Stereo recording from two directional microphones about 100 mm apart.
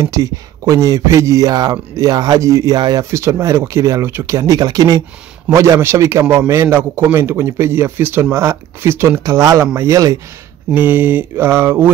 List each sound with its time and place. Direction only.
0.0 s a man's voice: 35° right (ahead or behind)
10.7 s a man's voice: 20° right (ahead or behind)